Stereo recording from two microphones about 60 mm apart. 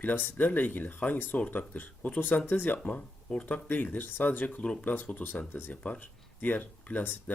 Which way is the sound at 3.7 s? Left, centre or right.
Left.